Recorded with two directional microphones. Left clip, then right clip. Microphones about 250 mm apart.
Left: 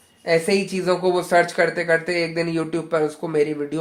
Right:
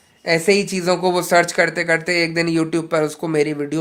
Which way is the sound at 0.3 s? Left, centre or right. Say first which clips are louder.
Right 3 dB; right.